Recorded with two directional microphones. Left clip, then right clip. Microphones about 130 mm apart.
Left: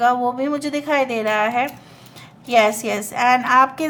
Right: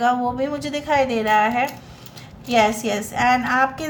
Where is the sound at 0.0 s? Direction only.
35° left (ahead or behind).